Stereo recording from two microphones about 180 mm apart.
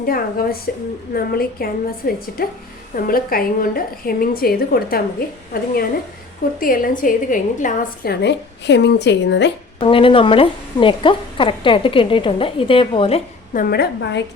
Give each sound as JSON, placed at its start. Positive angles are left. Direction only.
{"t": 0.0, "sound": "a woman's voice", "side_deg": 55}
{"t": 6.6, "sound": "a woman's voice", "side_deg": 50}
{"t": 8.1, "sound": "a woman's voice", "side_deg": 70}
{"t": 9.8, "sound": "a woman's voice", "side_deg": 30}
{"t": 13.5, "sound": "a woman's voice", "side_deg": 55}